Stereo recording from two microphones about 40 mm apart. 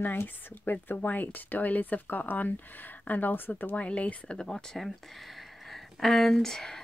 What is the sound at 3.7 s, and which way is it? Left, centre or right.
Speech, left.